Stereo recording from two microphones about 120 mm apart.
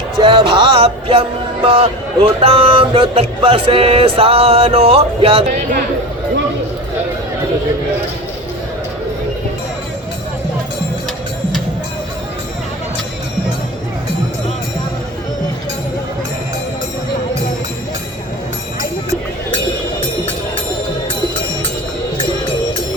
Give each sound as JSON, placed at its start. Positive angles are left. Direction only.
{"t": 0.2, "sound": "music", "side_deg": -45}